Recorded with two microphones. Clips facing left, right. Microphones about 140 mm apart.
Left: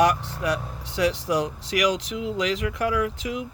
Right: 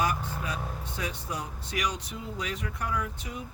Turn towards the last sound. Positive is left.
turn(degrees=90)